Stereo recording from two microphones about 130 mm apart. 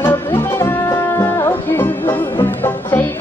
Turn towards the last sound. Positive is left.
turn(degrees=15)  # may be behind; listen again after turning